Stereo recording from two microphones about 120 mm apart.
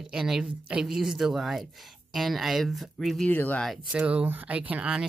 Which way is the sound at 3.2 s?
15° left (ahead or behind).